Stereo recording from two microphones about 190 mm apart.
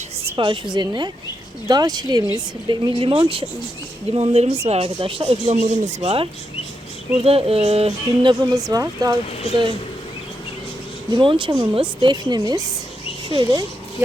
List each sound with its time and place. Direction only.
0.3 s a woman's voice: 25° right (ahead or behind)
5.5 s a woman's voice: 40° right (ahead or behind); by 9.1 s 20° right (ahead or behind)
11.1 s a woman's voice: 25° right (ahead or behind)